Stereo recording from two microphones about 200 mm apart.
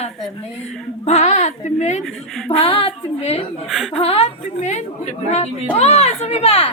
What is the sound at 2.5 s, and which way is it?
Speech, 30° left (ahead or behind).